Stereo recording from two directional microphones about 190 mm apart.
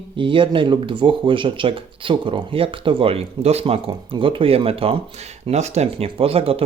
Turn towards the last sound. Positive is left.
turn(degrees=-30)  # may be behind; listen again after turning